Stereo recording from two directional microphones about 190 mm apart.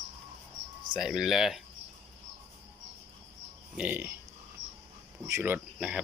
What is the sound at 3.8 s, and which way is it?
Speech, 10° right (ahead or behind).